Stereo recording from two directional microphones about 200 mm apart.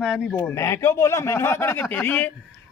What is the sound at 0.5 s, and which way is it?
Speech, 15° left (ahead or behind).